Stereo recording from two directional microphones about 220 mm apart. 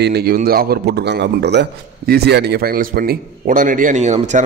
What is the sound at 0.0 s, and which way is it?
A man's voice, 45° right (ahead or behind).